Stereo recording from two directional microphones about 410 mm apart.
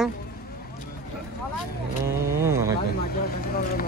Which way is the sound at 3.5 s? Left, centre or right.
Left.